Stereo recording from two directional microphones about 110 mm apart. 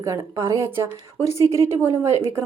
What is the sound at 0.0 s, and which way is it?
A woman's voice, 25° right (ahead or behind).